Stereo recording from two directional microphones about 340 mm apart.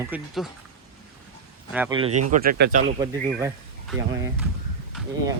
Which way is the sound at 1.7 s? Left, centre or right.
Centre.